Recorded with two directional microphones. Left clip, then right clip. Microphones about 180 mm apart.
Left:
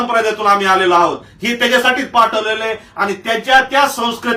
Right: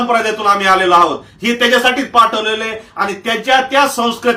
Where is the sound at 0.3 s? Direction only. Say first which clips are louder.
Even; 5° right (ahead or behind).